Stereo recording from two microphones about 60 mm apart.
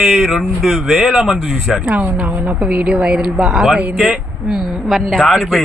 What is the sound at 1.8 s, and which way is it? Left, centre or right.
A woman's voice, right.